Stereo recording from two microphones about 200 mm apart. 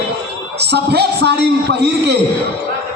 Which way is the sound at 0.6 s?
55° right (ahead or behind).